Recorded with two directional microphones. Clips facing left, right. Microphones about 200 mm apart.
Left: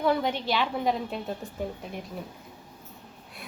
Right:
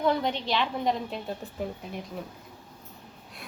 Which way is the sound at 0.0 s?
5° left (ahead or behind).